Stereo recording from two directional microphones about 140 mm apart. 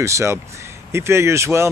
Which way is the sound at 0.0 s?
20° right (ahead or behind).